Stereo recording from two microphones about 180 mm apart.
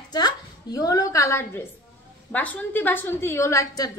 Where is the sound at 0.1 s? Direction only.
20° left (ahead or behind).